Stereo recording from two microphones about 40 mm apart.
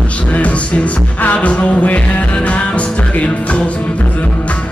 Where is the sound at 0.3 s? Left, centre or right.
Left.